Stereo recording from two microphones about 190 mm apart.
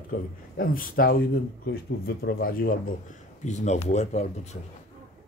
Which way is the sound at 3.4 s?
35° left (ahead or behind).